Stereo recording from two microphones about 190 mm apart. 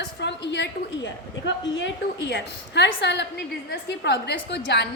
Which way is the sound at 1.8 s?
65° left (ahead or behind).